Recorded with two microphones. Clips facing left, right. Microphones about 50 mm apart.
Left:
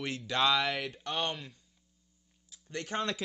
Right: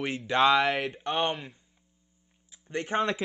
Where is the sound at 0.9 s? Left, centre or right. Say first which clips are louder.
Right 6 dB; right.